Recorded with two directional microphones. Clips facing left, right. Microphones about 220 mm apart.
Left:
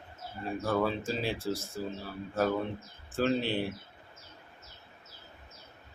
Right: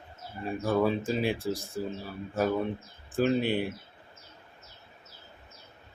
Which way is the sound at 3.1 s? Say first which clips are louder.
Right 3 dB; 15° right (ahead or behind).